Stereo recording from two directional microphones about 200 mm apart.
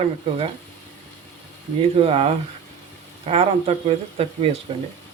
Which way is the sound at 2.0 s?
30° right (ahead or behind).